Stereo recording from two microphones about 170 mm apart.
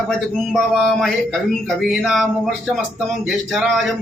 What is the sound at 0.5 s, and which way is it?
Male singing, centre (ahead or behind).